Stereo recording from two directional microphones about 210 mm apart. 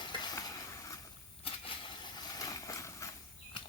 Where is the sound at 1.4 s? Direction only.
25° left (ahead or behind).